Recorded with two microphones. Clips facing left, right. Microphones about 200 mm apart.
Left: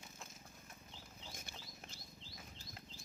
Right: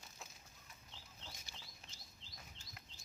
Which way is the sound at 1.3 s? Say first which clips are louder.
Left 6 dB; 55° left (ahead or behind).